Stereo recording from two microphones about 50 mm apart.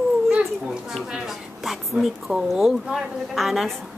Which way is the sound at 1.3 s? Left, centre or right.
Centre.